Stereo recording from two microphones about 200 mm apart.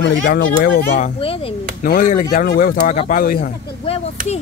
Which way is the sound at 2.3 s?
45° left (ahead or behind).